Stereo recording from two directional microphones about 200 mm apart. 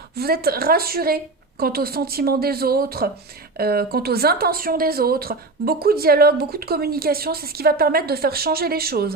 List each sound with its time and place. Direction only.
0.2 s a woman's voice: 50° right (ahead or behind)